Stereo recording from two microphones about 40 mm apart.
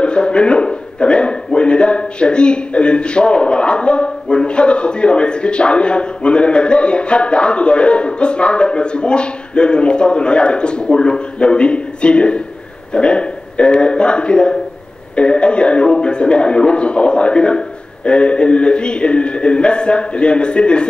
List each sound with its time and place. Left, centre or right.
0.0 s a man's voice: left